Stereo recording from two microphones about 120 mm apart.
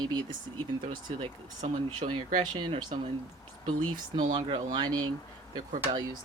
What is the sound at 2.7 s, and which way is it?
Speech, 55° right (ahead or behind).